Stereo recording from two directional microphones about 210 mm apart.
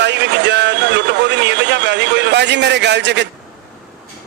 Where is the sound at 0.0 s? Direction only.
55° right (ahead or behind).